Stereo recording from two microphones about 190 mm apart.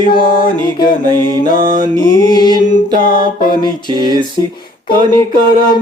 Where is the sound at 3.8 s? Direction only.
20° right (ahead or behind).